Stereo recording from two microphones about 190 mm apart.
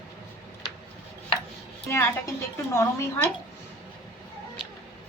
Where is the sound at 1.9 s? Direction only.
15° left (ahead or behind).